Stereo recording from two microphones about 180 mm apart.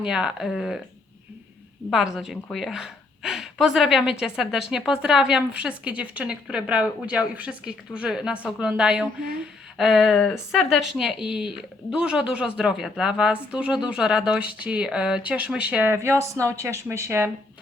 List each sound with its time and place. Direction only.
0.0 s a woman's voice: 5° right (ahead or behind)
1.9 s a woman's voice: centre (ahead or behind)